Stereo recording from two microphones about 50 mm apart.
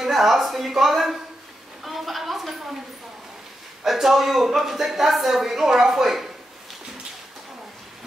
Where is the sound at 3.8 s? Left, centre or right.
Centre.